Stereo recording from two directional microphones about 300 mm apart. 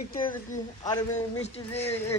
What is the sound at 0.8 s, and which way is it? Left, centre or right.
Speech, centre.